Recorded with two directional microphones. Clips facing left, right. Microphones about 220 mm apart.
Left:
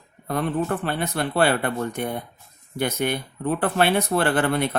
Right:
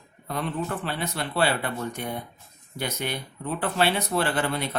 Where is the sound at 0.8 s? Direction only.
50° left (ahead or behind).